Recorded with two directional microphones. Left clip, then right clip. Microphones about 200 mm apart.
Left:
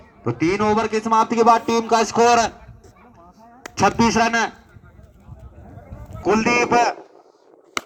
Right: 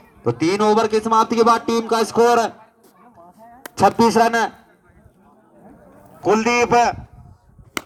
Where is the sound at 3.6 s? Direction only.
35° right (ahead or behind).